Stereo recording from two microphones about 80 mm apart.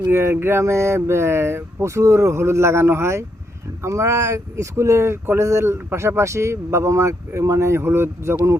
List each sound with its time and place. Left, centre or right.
0.1 s speech: right